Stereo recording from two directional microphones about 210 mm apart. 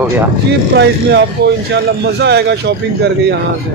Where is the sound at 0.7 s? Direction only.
55° right (ahead or behind).